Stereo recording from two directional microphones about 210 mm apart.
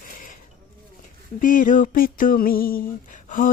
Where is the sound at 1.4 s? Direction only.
40° left (ahead or behind).